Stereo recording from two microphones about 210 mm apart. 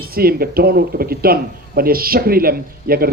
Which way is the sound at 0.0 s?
45° right (ahead or behind).